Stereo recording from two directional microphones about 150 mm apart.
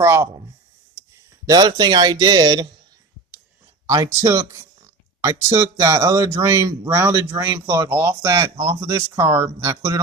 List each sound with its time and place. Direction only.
0.0 s speech: 20° right (ahead or behind)
3.8 s speech: 20° right (ahead or behind)